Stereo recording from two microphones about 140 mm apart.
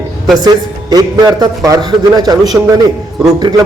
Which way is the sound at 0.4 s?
25° right (ahead or behind).